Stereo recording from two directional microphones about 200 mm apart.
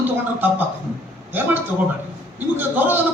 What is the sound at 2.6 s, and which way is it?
Speech, 10° right (ahead or behind).